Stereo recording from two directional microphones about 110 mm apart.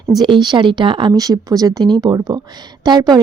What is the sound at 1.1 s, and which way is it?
A woman's voice, 35° right (ahead or behind).